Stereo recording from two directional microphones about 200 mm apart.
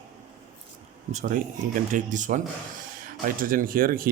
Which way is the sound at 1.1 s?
40° right (ahead or behind).